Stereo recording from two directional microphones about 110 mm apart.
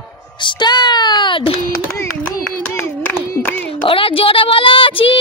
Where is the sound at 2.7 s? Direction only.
15° left (ahead or behind).